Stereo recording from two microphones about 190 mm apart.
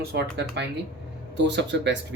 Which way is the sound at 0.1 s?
60° right (ahead or behind).